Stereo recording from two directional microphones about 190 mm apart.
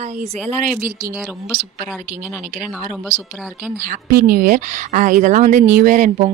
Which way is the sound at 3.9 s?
50° right (ahead or behind).